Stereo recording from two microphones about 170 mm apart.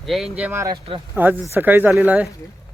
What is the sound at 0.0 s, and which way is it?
Speech, centre (ahead or behind).